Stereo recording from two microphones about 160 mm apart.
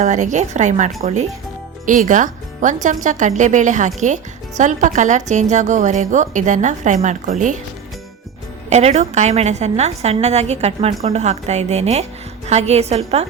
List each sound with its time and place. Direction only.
0.0 s speech: 50° right (ahead or behind)
8.7 s a woman's voice: 45° right (ahead or behind)